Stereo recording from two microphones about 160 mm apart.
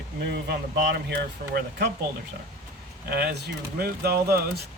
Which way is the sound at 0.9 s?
80° right.